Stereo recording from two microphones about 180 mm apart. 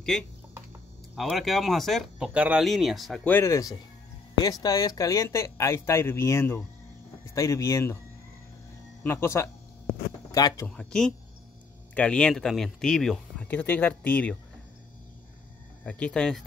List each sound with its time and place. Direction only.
1.1 s speech: centre (ahead or behind)
3.3 s speech: 15° left (ahead or behind)
9.0 s speech: 15° left (ahead or behind)
10.8 s speech: 5° left (ahead or behind)
15.8 s speech: 5° left (ahead or behind)